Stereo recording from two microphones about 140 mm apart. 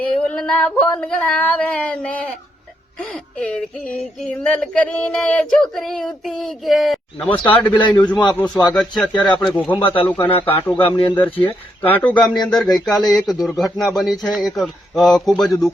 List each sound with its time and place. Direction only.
0.0 s singing: 5° left (ahead or behind)
3.0 s speech: 5° left (ahead or behind)
3.9 s a sound: 5° left (ahead or behind)
7.7 s speech: 35° left (ahead or behind)
8.3 s speech: 10° left (ahead or behind)
8.7 s a sound: 5° left (ahead or behind)
9.1 s speech: 30° left (ahead or behind)
9.6 s speech: 15° left (ahead or behind)
10.3 s speech: 40° left (ahead or behind)
11.3 s speech: 15° left (ahead or behind)
12.3 s speech: 30° left (ahead or behind)
12.7 s a sound: centre (ahead or behind)